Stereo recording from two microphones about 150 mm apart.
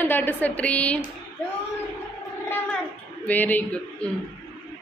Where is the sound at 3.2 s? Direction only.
10° left (ahead or behind).